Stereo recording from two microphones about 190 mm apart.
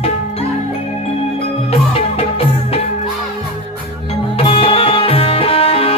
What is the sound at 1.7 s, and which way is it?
Music, 30° left (ahead or behind).